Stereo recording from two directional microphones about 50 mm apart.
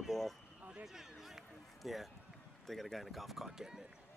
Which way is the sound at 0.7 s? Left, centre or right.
Centre.